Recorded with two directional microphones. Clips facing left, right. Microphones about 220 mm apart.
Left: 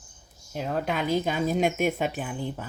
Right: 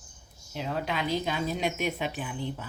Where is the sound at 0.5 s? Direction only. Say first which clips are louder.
Left 3 dB; 45° left (ahead or behind).